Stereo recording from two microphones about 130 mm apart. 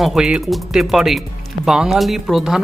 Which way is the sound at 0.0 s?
5° right (ahead or behind).